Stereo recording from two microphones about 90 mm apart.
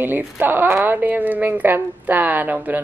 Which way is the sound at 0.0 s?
25° right (ahead or behind).